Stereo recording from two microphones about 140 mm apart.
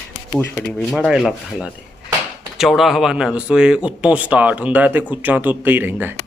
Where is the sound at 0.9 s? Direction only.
Centre (ahead or behind).